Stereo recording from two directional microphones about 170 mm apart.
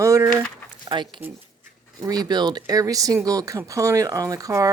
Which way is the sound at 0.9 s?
30° right (ahead or behind).